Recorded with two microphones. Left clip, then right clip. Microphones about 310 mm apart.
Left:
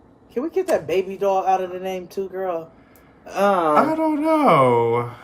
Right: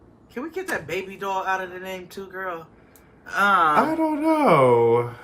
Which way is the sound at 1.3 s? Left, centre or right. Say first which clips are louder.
Left 4 dB; right.